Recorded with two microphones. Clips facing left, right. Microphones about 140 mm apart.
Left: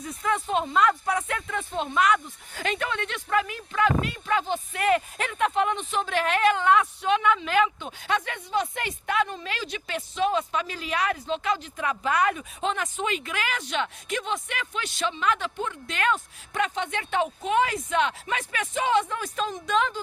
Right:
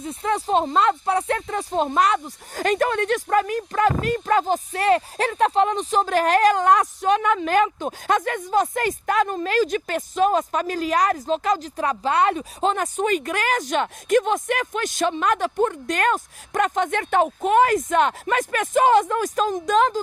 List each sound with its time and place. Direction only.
0.0 s speech: 25° right (ahead or behind)